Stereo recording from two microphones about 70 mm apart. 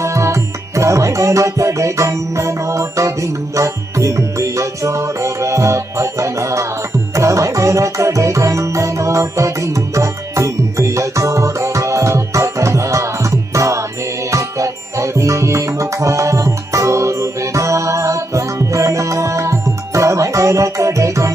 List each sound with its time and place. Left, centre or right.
0.0 s music: right